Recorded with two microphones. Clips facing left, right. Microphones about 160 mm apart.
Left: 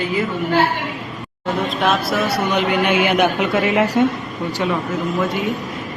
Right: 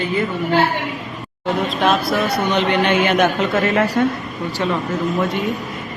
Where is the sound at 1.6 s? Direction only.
Centre (ahead or behind).